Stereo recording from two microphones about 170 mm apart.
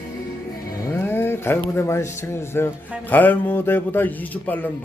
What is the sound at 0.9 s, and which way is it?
Music, 15° left (ahead or behind).